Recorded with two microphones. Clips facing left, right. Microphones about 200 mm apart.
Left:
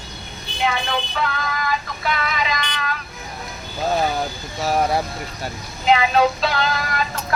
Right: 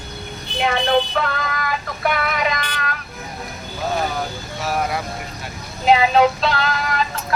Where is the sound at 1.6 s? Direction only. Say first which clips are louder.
Right 2 dB; 55° right (ahead or behind).